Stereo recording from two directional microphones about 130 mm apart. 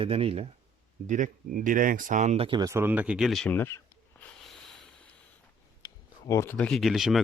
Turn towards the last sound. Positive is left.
turn(degrees=0)  # may be behind; listen again after turning